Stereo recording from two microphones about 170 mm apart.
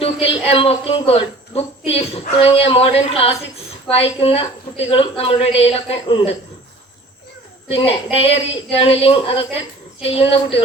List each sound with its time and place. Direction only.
0.0 s a sound: 35° left (ahead or behind)
3.8 s a man's voice: 35° left (ahead or behind)
7.7 s a man's voice: 35° left (ahead or behind)